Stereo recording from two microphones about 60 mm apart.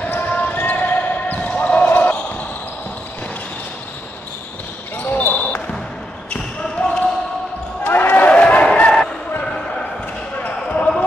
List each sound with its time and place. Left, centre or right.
0.0 s basketball bounce: left
5.0 s a sound: left
6.3 s basketball bounce: centre
7.8 s basketball bounce: left
8.4 s a sound: left
9.4 s basketball bounce: centre